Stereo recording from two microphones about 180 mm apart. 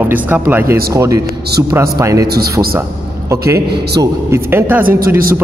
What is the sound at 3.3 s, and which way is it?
Speech, 15° right (ahead or behind).